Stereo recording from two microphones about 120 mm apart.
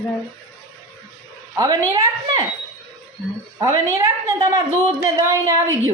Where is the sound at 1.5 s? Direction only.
30° right (ahead or behind).